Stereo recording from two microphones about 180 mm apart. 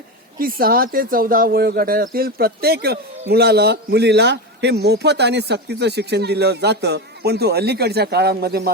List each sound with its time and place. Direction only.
0.3 s a man's voice: 55° right (ahead or behind)